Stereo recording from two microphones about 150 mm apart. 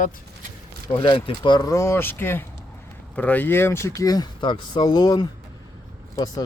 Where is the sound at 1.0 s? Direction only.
35° left (ahead or behind).